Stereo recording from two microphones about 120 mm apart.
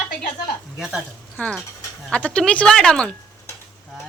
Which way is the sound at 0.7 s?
5° right (ahead or behind).